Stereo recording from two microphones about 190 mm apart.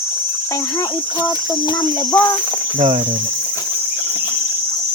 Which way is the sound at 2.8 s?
40° right (ahead or behind).